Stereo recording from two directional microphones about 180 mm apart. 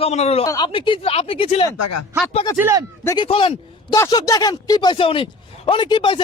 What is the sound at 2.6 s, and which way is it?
Speech, 15° right (ahead or behind).